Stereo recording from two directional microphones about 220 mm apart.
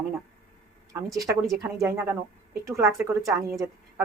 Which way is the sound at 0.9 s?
15° right (ahead or behind).